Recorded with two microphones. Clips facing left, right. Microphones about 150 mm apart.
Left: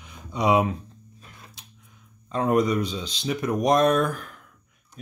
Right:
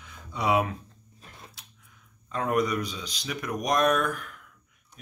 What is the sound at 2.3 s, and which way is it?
Speech, 25° left (ahead or behind).